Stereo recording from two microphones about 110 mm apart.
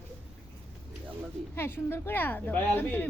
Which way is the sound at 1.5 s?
20° left (ahead or behind).